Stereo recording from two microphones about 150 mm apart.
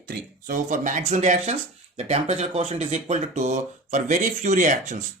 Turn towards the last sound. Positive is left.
turn(degrees=-50)  # may be behind; listen again after turning